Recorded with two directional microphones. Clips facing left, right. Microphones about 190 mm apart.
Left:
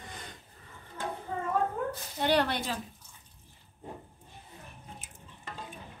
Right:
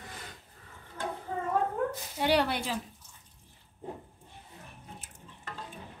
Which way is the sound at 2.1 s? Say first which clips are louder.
Even; 5° right (ahead or behind).